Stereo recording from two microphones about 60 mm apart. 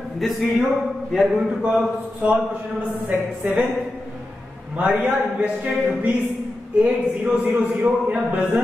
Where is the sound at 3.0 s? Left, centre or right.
Right.